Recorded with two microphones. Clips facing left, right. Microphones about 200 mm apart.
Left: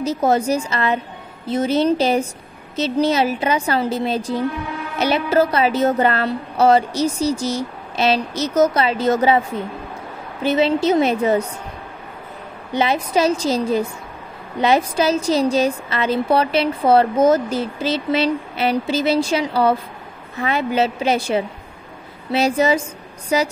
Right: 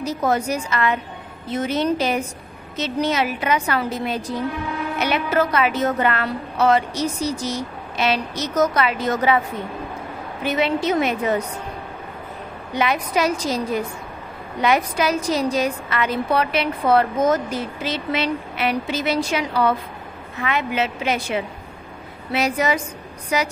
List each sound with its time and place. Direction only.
0.0 s a woman's voice: 25° left (ahead or behind)
10.4 s a woman's voice: 30° left (ahead or behind)
12.7 s a woman's voice: 30° left (ahead or behind)